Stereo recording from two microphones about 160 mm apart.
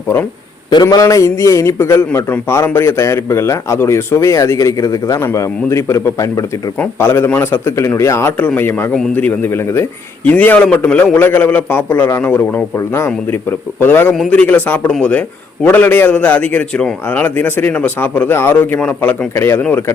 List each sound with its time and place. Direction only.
0.7 s a man's voice: 25° left (ahead or behind)